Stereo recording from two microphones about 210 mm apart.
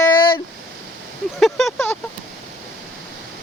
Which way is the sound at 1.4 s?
Centre (ahead or behind).